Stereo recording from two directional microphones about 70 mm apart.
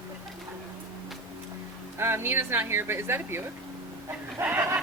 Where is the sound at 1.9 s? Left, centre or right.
Right.